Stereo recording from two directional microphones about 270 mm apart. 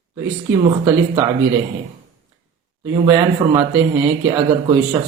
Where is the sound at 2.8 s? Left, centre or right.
Centre.